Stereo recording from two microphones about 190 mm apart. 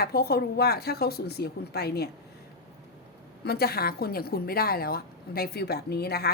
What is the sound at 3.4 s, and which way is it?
A woman's voice, 55° left (ahead or behind).